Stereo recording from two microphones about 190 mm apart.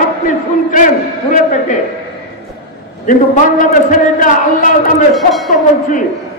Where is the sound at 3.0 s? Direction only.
45° left (ahead or behind).